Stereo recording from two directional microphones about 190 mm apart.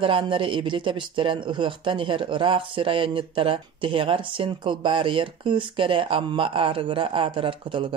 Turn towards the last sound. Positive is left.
turn(degrees=-25)  # may be behind; listen again after turning